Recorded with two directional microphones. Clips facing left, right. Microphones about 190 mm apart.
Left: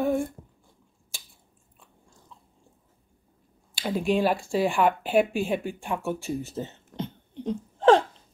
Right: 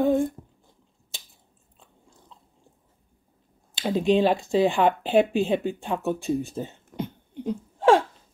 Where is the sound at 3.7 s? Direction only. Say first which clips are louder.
Right 4 dB; 20° right (ahead or behind).